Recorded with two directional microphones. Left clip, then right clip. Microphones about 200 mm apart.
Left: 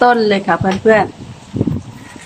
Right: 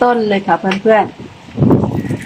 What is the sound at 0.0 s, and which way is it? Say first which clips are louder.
Speech: left 1 dB; 10° right (ahead or behind).